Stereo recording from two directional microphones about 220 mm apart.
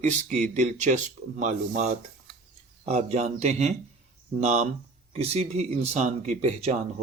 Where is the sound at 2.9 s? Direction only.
30° right (ahead or behind).